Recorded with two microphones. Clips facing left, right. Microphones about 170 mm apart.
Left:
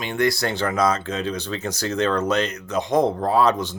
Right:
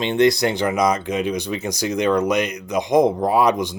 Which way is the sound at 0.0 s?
20° right (ahead or behind).